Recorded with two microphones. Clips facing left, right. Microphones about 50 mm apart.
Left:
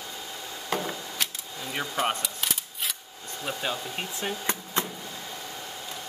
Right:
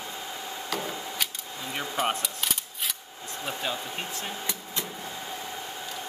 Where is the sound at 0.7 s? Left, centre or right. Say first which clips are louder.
Left 3 dB; left.